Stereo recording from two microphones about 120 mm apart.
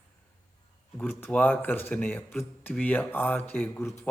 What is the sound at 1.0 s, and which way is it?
Speech, 15° left (ahead or behind).